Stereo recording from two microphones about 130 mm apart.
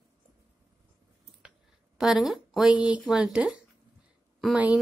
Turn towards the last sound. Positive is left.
turn(degrees=-10)  # may be behind; listen again after turning